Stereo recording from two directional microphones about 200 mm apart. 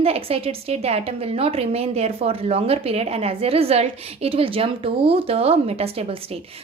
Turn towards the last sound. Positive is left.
turn(degrees=-30)  # may be behind; listen again after turning